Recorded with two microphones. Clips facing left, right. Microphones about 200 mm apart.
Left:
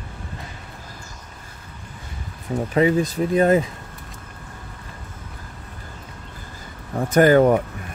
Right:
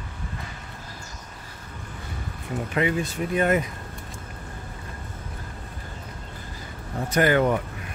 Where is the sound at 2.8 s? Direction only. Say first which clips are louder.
Left 7 dB; 35° left (ahead or behind).